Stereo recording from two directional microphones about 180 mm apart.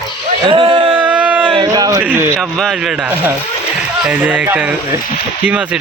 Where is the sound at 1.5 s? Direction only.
25° right (ahead or behind).